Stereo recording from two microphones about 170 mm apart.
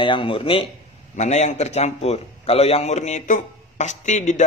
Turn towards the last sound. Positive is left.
turn(degrees=45)  # may be behind; listen again after turning